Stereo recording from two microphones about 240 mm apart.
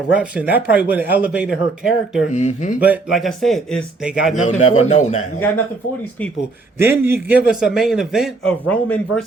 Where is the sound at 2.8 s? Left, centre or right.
Centre.